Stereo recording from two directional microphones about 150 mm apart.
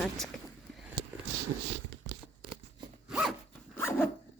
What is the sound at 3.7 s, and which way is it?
Zipper, 15° left (ahead or behind).